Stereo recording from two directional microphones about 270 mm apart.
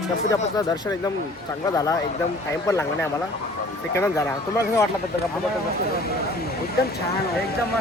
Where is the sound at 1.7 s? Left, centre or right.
Centre.